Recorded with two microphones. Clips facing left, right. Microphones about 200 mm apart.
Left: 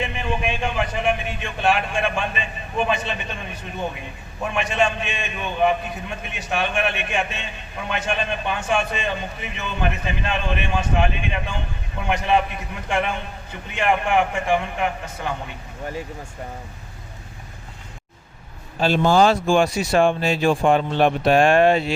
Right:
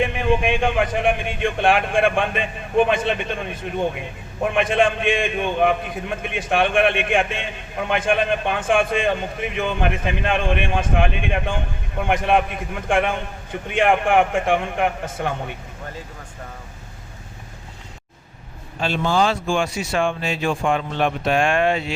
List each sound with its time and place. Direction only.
0.0 s a man's voice: 55° right (ahead or behind)
18.8 s speech: 40° left (ahead or behind)